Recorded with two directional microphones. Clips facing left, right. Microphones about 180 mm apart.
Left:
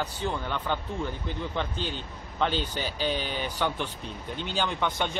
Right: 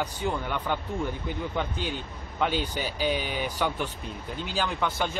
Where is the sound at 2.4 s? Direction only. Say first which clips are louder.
Right 1 dB; 10° right (ahead or behind).